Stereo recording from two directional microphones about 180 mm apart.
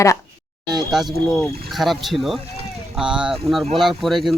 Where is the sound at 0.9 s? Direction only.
Centre (ahead or behind).